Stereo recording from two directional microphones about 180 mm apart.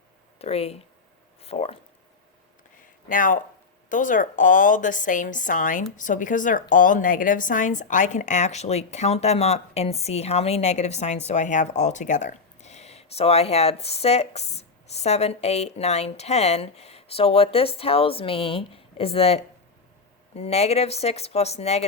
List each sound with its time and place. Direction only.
0.3 s speech: 35° left (ahead or behind)
1.4 s a sound: 35° left (ahead or behind)
3.1 s a woman's voice: 45° left (ahead or behind)